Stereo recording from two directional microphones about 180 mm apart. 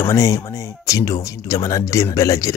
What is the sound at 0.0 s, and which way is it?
Speech, 15° left (ahead or behind).